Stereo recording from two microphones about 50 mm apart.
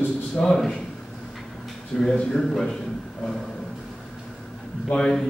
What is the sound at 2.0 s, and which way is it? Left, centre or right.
Speech, centre.